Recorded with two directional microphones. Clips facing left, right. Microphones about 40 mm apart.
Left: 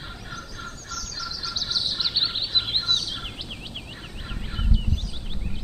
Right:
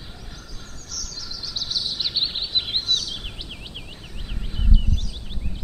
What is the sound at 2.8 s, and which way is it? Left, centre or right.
Bird, left.